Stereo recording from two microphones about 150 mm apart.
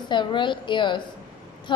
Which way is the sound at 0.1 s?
30° left (ahead or behind).